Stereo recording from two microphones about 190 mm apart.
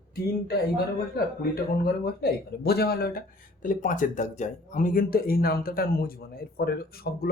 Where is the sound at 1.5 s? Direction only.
55° left (ahead or behind).